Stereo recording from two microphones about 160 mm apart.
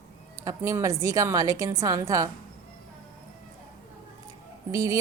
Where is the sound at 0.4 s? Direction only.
20° right (ahead or behind).